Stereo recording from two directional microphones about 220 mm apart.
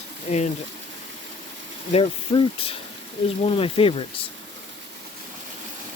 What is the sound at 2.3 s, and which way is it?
Speech, 20° left (ahead or behind).